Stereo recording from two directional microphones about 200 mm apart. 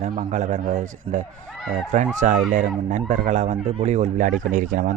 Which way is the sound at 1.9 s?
40° right (ahead or behind).